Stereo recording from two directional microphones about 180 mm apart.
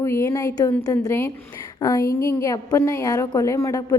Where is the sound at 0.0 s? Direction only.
15° left (ahead or behind).